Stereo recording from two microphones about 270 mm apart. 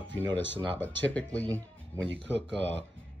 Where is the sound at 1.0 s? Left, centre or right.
Centre.